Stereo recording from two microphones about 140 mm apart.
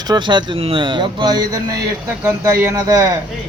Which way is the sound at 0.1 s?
35° right (ahead or behind).